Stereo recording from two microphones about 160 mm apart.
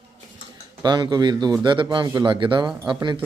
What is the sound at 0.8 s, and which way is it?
A man's voice, 25° right (ahead or behind).